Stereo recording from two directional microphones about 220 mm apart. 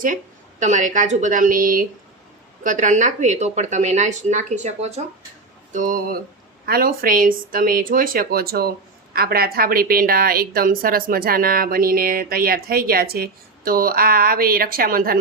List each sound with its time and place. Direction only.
0.6 s a woman's voice: 35° right (ahead or behind)